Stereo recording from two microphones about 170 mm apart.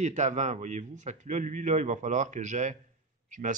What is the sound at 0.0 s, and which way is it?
A man's voice, 45° right (ahead or behind).